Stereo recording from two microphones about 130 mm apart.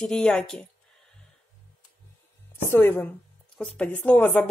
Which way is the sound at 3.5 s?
Centre (ahead or behind).